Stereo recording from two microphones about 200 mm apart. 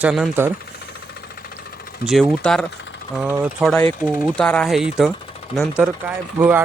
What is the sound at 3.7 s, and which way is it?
Speech, 10° left (ahead or behind).